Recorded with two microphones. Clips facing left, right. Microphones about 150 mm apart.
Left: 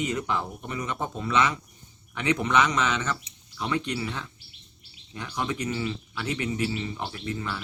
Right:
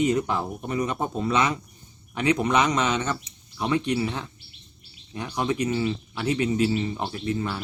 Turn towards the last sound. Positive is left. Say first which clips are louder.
# right 5 dB
turn(degrees=-25)  # may be behind; listen again after turning